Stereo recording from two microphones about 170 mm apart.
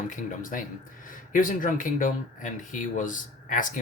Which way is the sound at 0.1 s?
50° left (ahead or behind).